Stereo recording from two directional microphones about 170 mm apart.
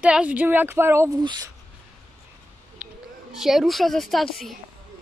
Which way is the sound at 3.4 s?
Centre (ahead or behind).